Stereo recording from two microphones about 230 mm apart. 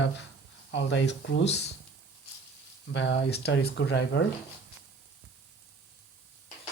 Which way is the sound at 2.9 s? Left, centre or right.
Left.